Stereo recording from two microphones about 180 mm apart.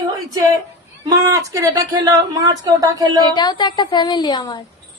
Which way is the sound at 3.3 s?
25° left (ahead or behind).